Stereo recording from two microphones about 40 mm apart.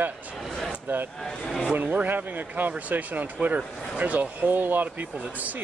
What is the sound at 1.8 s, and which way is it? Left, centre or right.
Speech, right.